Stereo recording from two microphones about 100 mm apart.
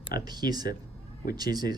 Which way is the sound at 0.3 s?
45° right (ahead or behind).